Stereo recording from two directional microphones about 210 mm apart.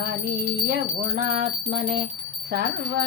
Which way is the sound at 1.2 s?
30° right (ahead or behind).